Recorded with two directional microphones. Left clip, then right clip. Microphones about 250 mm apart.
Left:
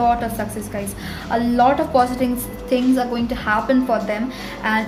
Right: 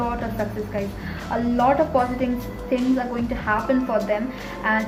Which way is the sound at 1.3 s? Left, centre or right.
Left.